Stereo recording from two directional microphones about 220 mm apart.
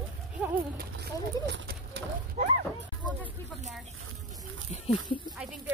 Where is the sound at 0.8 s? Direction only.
50° right (ahead or behind).